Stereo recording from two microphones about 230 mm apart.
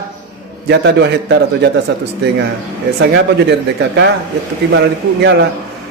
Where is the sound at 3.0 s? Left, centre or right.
Right.